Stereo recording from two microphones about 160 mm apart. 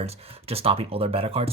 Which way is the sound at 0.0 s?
40° right (ahead or behind).